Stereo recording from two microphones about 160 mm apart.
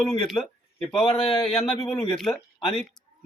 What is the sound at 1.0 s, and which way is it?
Speech, 35° left (ahead or behind).